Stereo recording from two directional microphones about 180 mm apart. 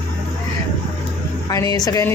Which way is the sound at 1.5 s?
20° left (ahead or behind).